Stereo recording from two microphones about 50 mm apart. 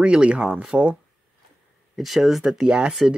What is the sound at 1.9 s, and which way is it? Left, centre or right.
Speech, centre.